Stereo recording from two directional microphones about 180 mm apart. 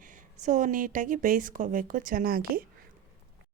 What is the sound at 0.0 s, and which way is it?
A woman's voice, 45° right (ahead or behind).